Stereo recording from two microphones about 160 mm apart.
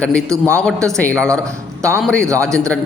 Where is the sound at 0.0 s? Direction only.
5° left (ahead or behind).